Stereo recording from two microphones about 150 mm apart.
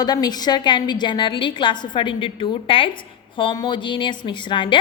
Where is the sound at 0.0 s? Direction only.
25° left (ahead or behind).